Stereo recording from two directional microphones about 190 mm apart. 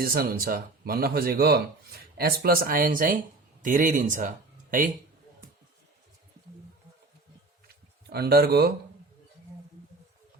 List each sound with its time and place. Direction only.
0.0 s speech: 50° right (ahead or behind)
8.1 s speech: 55° right (ahead or behind)